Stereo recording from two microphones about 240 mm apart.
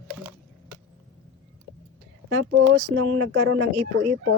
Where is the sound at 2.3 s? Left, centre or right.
Right.